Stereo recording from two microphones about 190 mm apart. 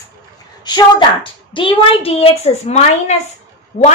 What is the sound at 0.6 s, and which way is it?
A woman's voice, 25° left (ahead or behind).